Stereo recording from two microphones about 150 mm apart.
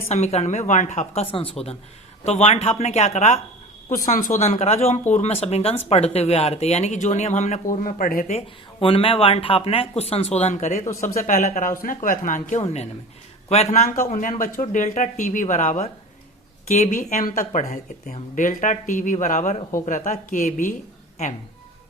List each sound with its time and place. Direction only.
0.1 s speech: 45° left (ahead or behind); by 8.3 s 65° left (ahead or behind)
8.3 s speech: 40° left (ahead or behind); by 20.7 s 60° left (ahead or behind)